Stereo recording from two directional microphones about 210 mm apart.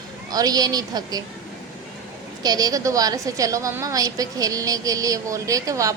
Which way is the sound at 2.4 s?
20° right (ahead or behind).